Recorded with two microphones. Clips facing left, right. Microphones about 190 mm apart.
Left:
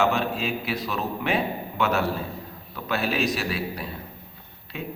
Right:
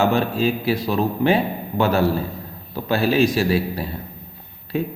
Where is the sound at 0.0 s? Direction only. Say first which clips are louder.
Right 5 dB; 35° right (ahead or behind).